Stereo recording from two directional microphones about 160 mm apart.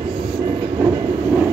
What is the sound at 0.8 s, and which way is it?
Train, 15° right (ahead or behind).